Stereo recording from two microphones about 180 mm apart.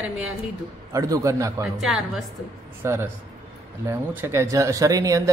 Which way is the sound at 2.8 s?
15° right (ahead or behind).